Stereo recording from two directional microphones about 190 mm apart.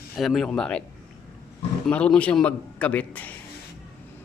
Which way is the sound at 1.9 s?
5° left (ahead or behind).